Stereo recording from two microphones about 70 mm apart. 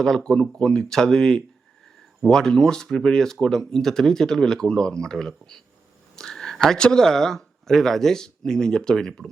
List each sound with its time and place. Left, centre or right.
0.0 s speech: centre
6.1 s a sound: centre
6.7 s speech: centre